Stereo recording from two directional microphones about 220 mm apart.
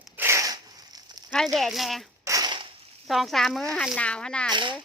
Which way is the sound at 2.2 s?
15° right (ahead or behind).